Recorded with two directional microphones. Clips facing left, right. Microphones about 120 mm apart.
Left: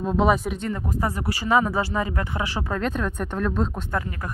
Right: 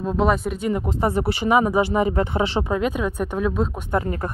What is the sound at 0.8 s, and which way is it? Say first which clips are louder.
Speech: right 4 dB; 25° right (ahead or behind).